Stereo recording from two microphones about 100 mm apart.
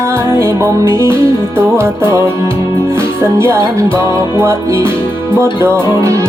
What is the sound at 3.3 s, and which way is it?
Music, 25° right (ahead or behind).